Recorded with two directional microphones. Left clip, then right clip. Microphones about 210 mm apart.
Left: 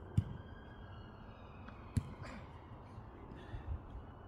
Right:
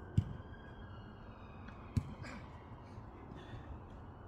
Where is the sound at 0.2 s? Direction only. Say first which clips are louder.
Right 1 dB; 20° left (ahead or behind).